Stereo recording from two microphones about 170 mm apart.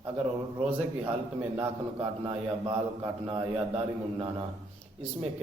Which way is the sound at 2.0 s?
30° right (ahead or behind).